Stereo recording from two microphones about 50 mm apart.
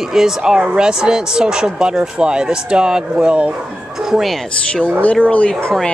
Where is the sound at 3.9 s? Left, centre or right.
Centre.